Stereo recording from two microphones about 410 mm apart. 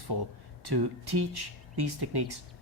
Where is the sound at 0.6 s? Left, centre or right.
Right.